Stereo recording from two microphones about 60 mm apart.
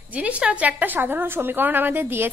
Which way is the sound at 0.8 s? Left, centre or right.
Right.